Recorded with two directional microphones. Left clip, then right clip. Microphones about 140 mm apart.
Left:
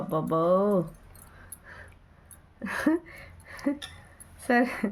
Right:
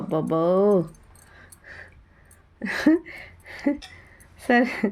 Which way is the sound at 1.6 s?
10° right (ahead or behind).